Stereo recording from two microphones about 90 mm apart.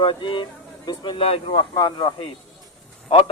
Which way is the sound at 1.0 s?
70° left (ahead or behind).